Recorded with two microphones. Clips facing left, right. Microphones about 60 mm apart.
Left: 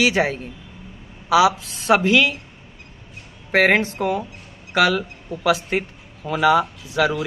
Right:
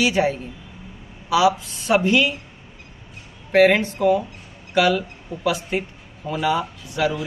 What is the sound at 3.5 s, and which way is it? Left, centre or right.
Speech, left.